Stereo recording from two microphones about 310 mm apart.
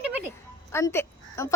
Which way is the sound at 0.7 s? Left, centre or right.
Centre.